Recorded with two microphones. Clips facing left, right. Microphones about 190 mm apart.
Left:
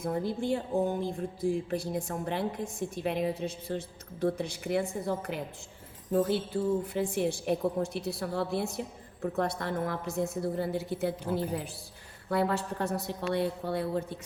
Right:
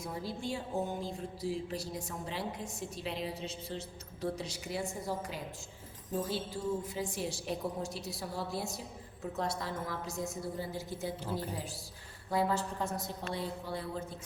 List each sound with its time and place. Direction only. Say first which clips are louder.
0.0 s a woman's voice: left 8 dB; 55° left (ahead or behind)
12.3 s a woman's voice: left 3 dB; 65° left (ahead or behind)